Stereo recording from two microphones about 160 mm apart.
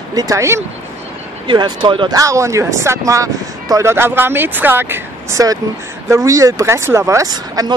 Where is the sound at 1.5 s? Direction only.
30° right (ahead or behind).